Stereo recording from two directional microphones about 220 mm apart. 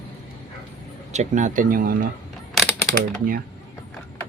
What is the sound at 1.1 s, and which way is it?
Speech, 35° right (ahead or behind).